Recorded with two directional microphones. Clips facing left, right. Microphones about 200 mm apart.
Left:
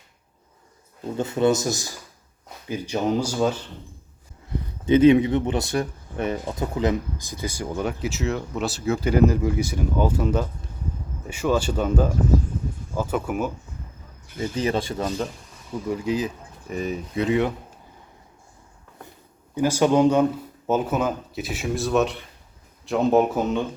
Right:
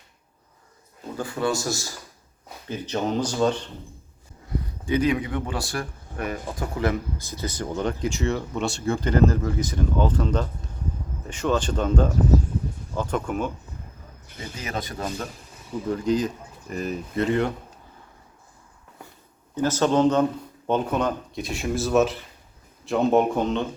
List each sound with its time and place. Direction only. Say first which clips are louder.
1.1 s speech: left 5 dB; 25° left (ahead or behind); by 3.7 s 5° left (ahead or behind)
4.9 s speech: left 8 dB; 25° left (ahead or behind); by 13.5 s 5° left (ahead or behind)
14.3 s speech: left 9 dB; 50° left (ahead or behind)
14.5 s speech: left 7 dB; 30° left (ahead or behind)
15.9 s speech: right 2 dB; 5° left (ahead or behind)
19.5 s speech: left 2 dB; 10° left (ahead or behind)